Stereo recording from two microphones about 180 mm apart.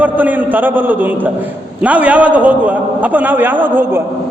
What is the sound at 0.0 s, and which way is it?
A man's voice, 10° right (ahead or behind).